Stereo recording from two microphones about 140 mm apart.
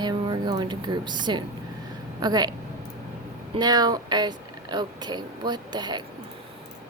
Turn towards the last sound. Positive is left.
turn(degrees=-30)  # may be behind; listen again after turning